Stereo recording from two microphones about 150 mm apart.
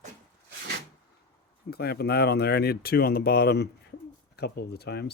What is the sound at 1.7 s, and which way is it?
Speech, 90° left.